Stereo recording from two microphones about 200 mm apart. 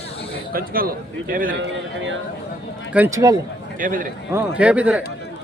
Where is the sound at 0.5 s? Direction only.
45° right (ahead or behind).